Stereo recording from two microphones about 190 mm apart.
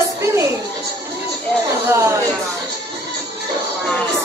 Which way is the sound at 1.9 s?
15° right (ahead or behind).